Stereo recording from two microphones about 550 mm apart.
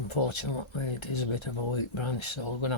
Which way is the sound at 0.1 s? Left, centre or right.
Left.